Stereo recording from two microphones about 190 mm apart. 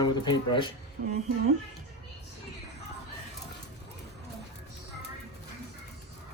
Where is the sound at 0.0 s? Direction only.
25° left (ahead or behind).